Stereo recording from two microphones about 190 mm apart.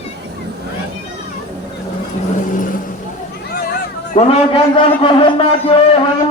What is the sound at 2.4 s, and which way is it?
Vehicle, 45° left (ahead or behind).